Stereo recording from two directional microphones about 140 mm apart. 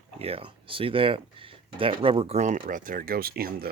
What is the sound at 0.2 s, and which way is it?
Speech, 45° right (ahead or behind).